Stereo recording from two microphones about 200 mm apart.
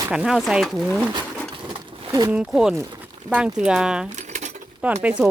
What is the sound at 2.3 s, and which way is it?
Speech, 5° right (ahead or behind).